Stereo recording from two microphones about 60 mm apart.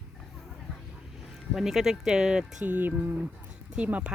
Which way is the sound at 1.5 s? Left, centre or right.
Centre.